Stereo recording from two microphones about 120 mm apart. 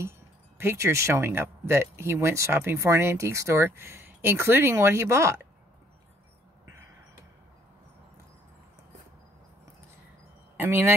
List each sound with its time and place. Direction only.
0.6 s speech: 20° right (ahead or behind)
10.6 s speech: 20° right (ahead or behind)